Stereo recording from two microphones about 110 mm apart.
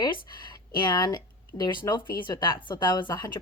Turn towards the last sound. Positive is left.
turn(degrees=40)  # may be behind; listen again after turning